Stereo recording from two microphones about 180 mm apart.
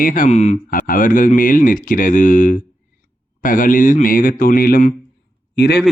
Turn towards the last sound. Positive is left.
turn(degrees=65)  # may be behind; listen again after turning